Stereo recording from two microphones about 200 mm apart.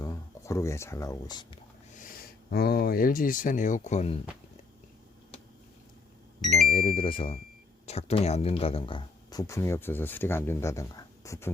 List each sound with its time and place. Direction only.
0.0 s speech: 15° left (ahead or behind)
2.5 s speech: 50° left (ahead or behind); by 4.2 s 35° left (ahead or behind)
6.4 s speech: centre (ahead or behind)
6.7 s speech: 30° left (ahead or behind)